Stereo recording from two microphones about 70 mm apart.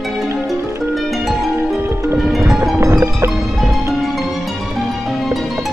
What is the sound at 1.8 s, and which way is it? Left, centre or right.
Music, right.